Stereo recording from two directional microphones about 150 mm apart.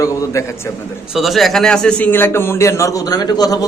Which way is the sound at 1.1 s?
Centre (ahead or behind).